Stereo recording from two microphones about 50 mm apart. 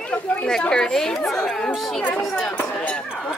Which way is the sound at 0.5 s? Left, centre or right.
Centre.